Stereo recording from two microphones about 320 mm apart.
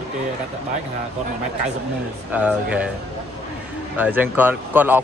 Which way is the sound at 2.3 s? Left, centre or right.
Centre.